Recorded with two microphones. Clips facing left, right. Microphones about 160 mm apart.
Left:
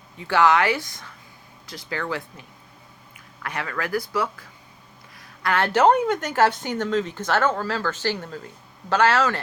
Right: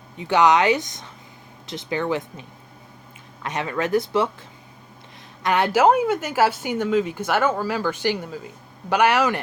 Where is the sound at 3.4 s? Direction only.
20° right (ahead or behind).